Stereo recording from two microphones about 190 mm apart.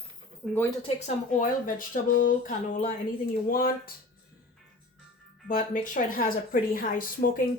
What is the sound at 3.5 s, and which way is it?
Speech, 50° left (ahead or behind).